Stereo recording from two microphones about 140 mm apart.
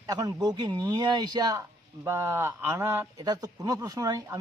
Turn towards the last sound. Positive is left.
turn(degrees=-25)  # may be behind; listen again after turning